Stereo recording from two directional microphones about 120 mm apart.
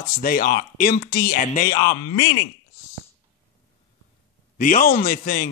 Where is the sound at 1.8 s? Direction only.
30° left (ahead or behind).